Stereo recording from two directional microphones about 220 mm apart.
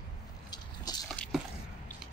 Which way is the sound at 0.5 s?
20° left (ahead or behind).